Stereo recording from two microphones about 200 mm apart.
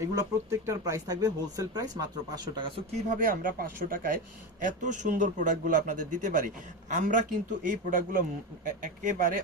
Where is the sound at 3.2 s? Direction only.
45° right (ahead or behind).